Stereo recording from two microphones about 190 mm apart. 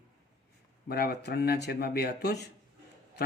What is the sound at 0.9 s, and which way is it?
Speech, 55° left (ahead or behind).